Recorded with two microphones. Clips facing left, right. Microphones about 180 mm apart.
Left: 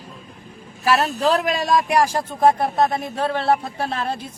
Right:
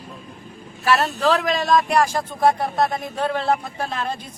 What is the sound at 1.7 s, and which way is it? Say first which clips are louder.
Speech: even; 10° left (ahead or behind).